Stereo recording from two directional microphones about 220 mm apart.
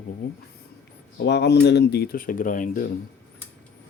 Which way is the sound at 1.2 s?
50° left (ahead or behind).